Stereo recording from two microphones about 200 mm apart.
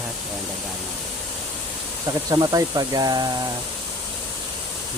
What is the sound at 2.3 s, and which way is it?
Speech, 20° right (ahead or behind).